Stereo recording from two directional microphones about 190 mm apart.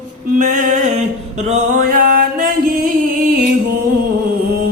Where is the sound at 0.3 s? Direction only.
45° right (ahead or behind).